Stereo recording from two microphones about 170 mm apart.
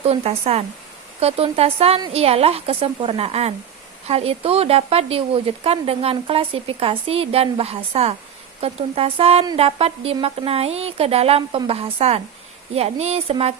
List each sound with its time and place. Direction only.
0.0 s speech: 35° right (ahead or behind)